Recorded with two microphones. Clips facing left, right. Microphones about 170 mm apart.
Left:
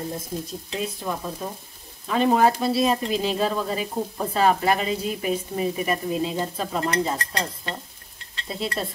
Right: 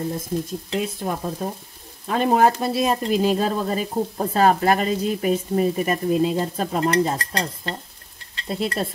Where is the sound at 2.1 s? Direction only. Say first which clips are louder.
Right 1 dB; 50° right (ahead or behind).